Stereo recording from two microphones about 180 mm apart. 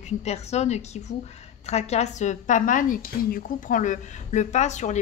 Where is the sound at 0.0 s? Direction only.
40° left (ahead or behind).